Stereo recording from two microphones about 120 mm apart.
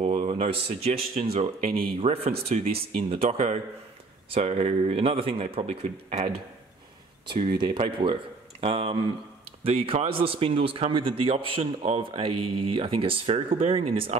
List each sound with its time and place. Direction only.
0.0 s speech: 55° right (ahead or behind)
7.4 s a man's voice: 40° right (ahead or behind)